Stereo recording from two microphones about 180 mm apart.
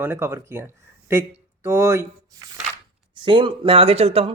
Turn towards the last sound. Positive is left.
turn(degrees=-35)  # may be behind; listen again after turning